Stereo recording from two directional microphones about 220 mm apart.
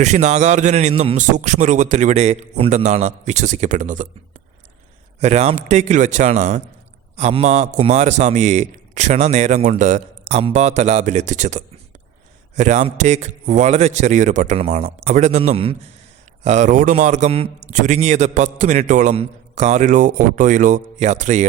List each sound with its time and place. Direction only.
0.0 s a man's voice: 30° right (ahead or behind)
5.2 s a man's voice: 30° right (ahead or behind)